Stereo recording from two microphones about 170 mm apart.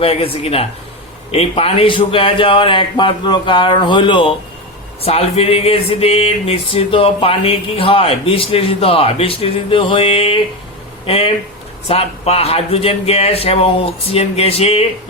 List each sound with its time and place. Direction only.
0.0 s a man's voice: 35° left (ahead or behind)